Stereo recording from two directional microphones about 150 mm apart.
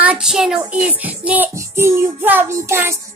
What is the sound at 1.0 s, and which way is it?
Child singing, 10° right (ahead or behind).